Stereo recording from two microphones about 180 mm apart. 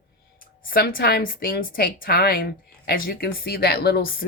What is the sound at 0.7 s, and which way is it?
A woman's voice, 55° left (ahead or behind).